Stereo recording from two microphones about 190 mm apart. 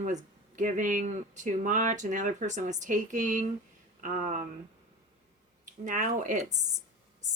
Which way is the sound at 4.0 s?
45° right (ahead or behind).